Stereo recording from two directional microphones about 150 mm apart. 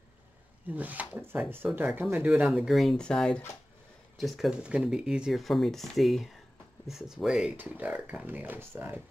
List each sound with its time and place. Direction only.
0.7 s speech: 10° right (ahead or behind)